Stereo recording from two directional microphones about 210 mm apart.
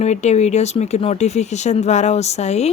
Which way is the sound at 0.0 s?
30° left (ahead or behind).